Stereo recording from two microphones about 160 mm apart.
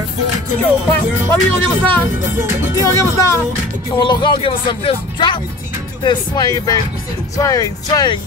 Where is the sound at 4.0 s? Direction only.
30° left (ahead or behind).